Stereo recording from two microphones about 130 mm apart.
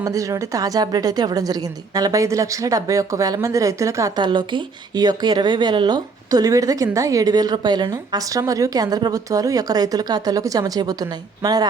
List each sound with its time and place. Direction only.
0.0 s a woman's voice: 25° right (ahead or behind)